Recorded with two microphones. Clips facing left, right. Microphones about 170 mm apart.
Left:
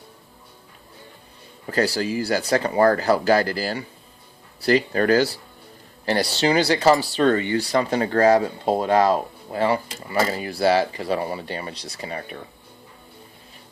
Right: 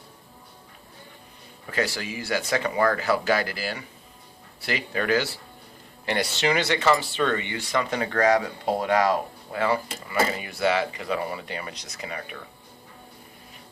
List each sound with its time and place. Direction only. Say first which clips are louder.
1.6 s speech: left 6 dB; 35° left (ahead or behind)